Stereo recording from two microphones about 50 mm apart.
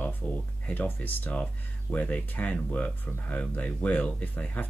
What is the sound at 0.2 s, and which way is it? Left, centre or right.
Speech, left.